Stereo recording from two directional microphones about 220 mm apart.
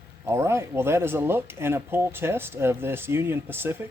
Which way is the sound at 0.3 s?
10° right (ahead or behind).